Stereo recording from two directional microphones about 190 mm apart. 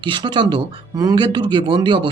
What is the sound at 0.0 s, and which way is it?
Speech, 25° right (ahead or behind).